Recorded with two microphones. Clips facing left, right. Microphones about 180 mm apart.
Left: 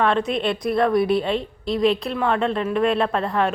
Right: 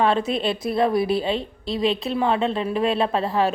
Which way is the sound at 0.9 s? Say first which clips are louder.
Left 2 dB; 30° right (ahead or behind).